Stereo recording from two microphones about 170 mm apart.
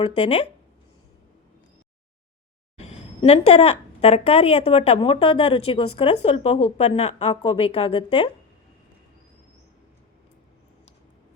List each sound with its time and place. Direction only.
0.0 s a woman's voice: 35° left (ahead or behind)
2.7 s a woman's voice: 35° left (ahead or behind)